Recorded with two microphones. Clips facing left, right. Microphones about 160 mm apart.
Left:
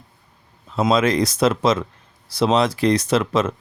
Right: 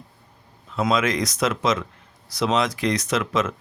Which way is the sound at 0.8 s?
30° left (ahead or behind).